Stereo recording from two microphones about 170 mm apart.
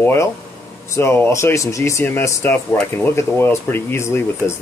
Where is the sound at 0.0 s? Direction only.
15° left (ahead or behind).